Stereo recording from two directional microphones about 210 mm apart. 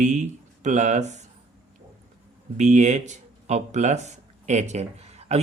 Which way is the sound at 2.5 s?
35° right (ahead or behind).